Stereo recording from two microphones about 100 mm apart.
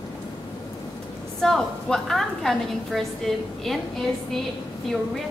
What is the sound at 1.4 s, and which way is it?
A woman's voice, 5° left (ahead or behind).